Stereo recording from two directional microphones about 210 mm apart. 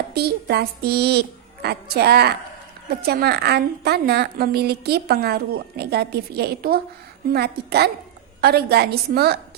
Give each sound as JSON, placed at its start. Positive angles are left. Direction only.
{"t": 0.1, "sound": "a woman's voice", "side_deg": -50}